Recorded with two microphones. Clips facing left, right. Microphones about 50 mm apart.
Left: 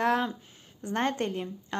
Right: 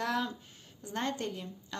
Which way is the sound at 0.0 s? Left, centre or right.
Left.